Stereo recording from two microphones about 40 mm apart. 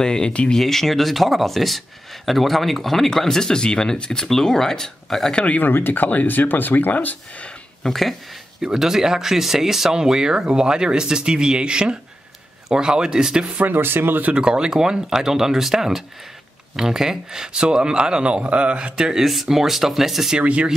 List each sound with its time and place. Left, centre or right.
0.0 s speech: centre
0.6 s speech: centre
5.3 s speech: left
5.6 s speech: left
7.8 s speech: centre
8.7 s speech: centre
13.6 s speech: right
14.3 s speech: right
18.9 s speech: centre
19.2 s speech: centre
20.3 s speech: right